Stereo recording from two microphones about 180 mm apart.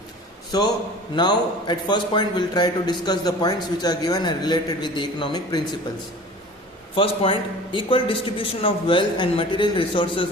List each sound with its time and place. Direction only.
0.5 s a man's voice: 20° left (ahead or behind)
6.9 s a man's voice: 30° left (ahead or behind)